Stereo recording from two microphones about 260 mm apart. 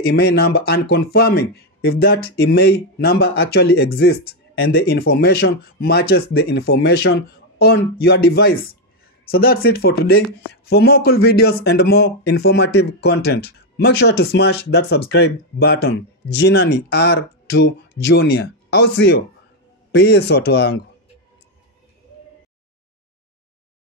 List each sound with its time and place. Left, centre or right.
0.0 s speech: left